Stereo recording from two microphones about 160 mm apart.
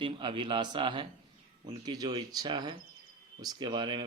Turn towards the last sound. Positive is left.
turn(degrees=-30)  # may be behind; listen again after turning